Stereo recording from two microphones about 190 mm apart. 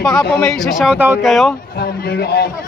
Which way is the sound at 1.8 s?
55° left (ahead or behind).